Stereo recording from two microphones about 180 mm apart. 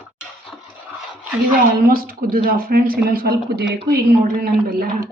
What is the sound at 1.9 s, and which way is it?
A woman's voice, 55° right (ahead or behind).